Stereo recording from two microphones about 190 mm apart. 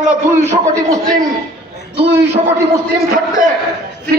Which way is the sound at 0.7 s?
15° right (ahead or behind).